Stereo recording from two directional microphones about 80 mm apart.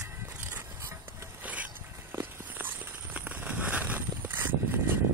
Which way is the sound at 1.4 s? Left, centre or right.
Centre.